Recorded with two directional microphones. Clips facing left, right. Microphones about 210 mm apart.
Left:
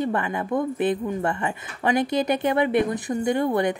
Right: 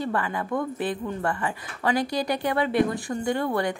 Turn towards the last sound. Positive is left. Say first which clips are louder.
# left 3 dB
turn(degrees=20)  # may be behind; listen again after turning